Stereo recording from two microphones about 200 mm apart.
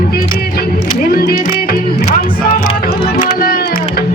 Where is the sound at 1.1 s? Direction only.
50° left (ahead or behind).